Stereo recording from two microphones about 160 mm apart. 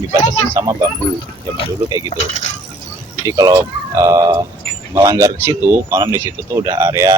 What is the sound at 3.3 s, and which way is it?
Speech, 20° right (ahead or behind).